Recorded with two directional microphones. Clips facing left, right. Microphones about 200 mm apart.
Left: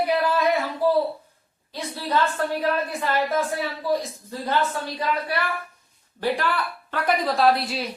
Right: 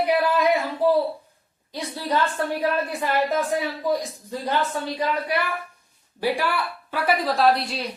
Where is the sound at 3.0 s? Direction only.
15° right (ahead or behind).